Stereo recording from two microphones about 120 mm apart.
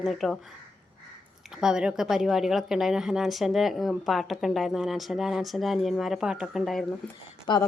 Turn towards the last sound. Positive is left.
turn(degrees=40)  # may be behind; listen again after turning